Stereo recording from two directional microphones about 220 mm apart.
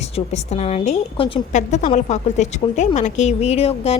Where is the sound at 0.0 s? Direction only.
30° left (ahead or behind).